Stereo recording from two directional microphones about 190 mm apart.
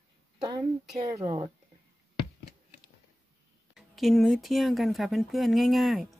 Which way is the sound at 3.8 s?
Centre (ahead or behind).